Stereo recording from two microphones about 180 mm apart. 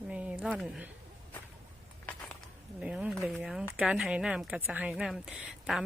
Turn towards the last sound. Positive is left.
turn(degrees=-5)  # may be behind; listen again after turning